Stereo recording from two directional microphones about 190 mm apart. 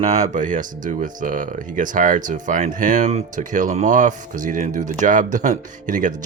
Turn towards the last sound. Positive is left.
turn(degrees=-40)  # may be behind; listen again after turning